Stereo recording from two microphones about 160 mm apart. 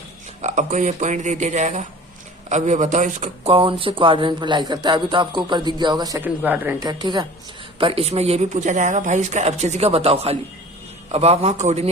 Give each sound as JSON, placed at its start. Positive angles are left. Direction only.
{"t": 0.4, "sound": "speech", "side_deg": -50}
{"t": 3.5, "sound": "speech", "side_deg": -35}
{"t": 6.2, "sound": "speech", "side_deg": -10}
{"t": 6.8, "sound": "a man's voice", "side_deg": -25}